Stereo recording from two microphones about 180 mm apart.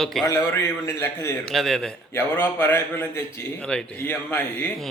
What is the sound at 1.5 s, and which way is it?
A man's voice, centre (ahead or behind).